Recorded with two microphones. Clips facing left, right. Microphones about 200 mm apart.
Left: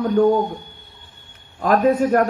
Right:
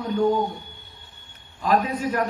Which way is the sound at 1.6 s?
50° left (ahead or behind).